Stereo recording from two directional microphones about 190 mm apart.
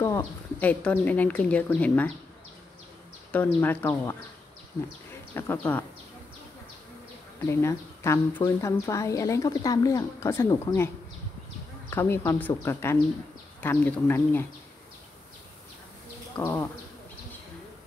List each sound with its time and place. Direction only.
0.0 s a woman's voice: 15° left (ahead or behind)
3.3 s a woman's voice: 10° left (ahead or behind)
5.3 s a woman's voice: 10° left (ahead or behind)
7.4 s a woman's voice: 15° left (ahead or behind)
11.9 s a woman's voice: 15° left (ahead or behind)
16.3 s a woman's voice: 10° left (ahead or behind)